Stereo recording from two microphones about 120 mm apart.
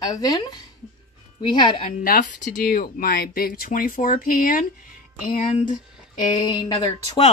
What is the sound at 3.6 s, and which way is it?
Speech, 90° left.